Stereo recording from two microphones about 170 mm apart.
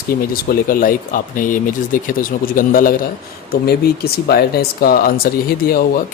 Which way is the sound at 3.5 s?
65° left (ahead or behind).